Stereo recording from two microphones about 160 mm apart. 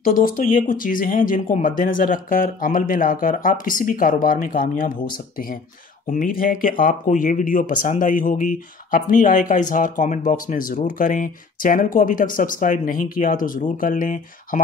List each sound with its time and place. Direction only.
0.0 s speech: 60° left (ahead or behind)
6.0 s speech: 60° left (ahead or behind)